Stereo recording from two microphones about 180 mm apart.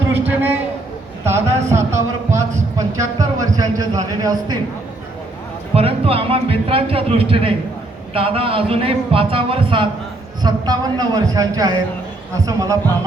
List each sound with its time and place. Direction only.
0.3 s a man's voice: 10° right (ahead or behind)
1.7 s a sound: 15° right (ahead or behind)
5.7 s a man's voice: 30° right (ahead or behind)